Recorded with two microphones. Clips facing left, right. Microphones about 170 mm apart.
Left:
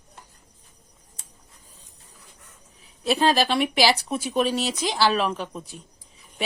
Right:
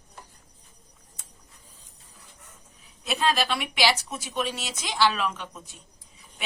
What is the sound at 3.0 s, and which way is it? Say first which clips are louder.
Speech: left 5 dB; 30° left (ahead or behind).